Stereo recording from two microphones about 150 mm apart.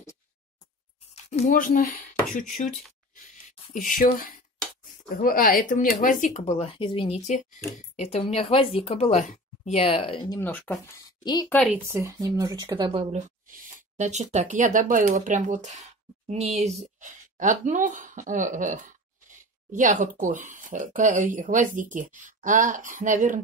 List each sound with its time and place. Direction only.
1.1 s music: 45° left (ahead or behind)
1.6 s speech: 65° left (ahead or behind)
3.7 s speech: 65° left (ahead or behind); by 4.4 s 85° left
5.1 s speech: 70° left (ahead or behind); by 10.2 s 40° left (ahead or behind)
10.4 s speech: 10° left (ahead or behind)
11.0 s a woman's voice: 25° left (ahead or behind)
11.4 s speech: 5° left (ahead or behind)
11.7 s speech: 15° right (ahead or behind); by 13.1 s 35° right (ahead or behind)
13.1 s speech: 60° right (ahead or behind)
16.5 s speech: 45° right (ahead or behind)